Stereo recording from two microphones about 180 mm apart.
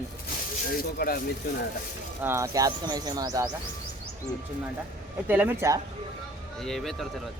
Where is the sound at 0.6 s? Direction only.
55° left (ahead or behind).